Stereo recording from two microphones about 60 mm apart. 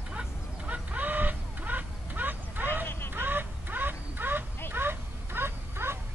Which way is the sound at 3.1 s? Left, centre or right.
Right.